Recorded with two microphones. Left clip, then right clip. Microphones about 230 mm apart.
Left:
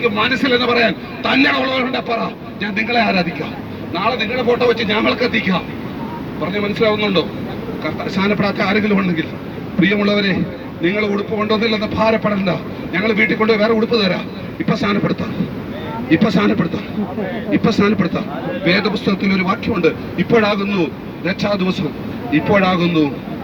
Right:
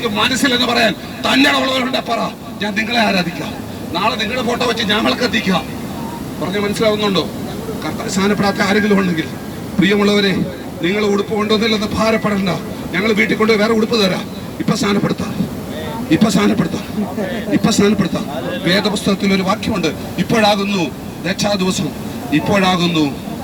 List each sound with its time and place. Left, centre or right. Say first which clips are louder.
0.0 s speech: even; right